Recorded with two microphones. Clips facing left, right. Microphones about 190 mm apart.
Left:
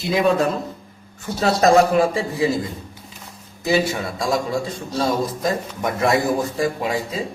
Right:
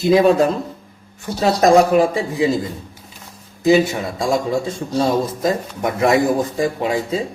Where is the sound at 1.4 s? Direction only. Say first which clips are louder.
Right 2 dB; 20° right (ahead or behind).